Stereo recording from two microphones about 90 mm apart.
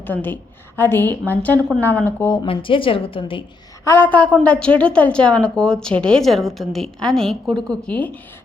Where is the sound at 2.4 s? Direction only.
80° left.